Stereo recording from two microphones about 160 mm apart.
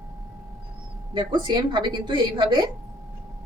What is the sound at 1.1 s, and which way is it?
A woman's voice, 30° right (ahead or behind).